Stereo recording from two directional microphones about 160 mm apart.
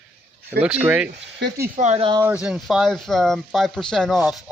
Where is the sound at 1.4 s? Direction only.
85° right.